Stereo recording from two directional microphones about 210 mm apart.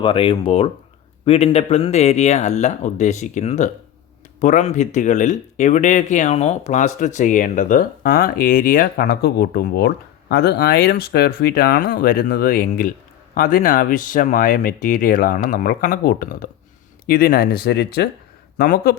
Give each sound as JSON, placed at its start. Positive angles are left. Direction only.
{"t": 0.0, "sound": "speech", "side_deg": 25}